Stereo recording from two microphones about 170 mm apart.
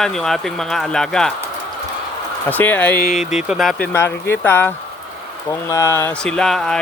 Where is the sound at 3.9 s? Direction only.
15° left (ahead or behind).